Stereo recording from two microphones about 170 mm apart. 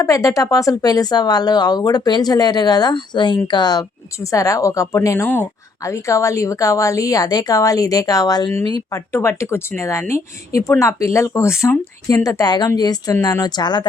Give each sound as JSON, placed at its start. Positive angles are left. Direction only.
{"t": 0.0, "sound": "speech", "side_deg": 20}